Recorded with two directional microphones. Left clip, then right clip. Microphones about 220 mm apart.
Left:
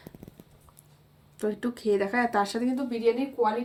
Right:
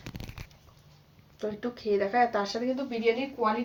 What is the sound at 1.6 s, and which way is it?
Speech, 55° left (ahead or behind).